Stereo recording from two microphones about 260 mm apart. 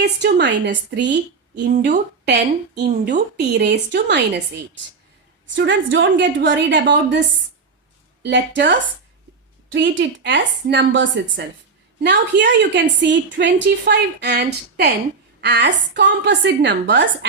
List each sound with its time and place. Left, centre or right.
0.0 s a woman's voice: right
8.2 s a woman's voice: right
9.7 s a woman's voice: right